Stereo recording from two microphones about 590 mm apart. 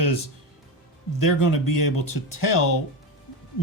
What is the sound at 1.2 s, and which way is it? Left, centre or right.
Speech, left.